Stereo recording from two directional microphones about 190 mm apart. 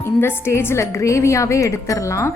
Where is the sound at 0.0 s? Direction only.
10° left (ahead or behind).